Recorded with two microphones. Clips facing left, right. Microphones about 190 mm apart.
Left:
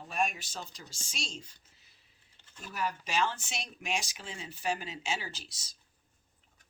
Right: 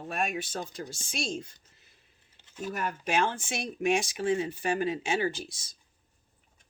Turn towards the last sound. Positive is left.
turn(degrees=-55)  # may be behind; listen again after turning